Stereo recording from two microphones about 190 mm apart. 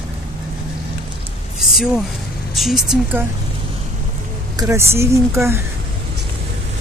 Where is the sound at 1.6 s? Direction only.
Centre (ahead or behind).